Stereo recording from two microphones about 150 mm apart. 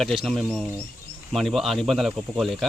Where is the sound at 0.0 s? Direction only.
Centre (ahead or behind).